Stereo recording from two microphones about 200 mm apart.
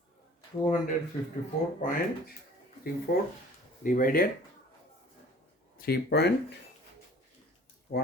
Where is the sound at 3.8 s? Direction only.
45° left (ahead or behind).